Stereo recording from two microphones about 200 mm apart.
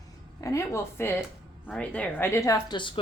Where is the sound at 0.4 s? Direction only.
15° left (ahead or behind).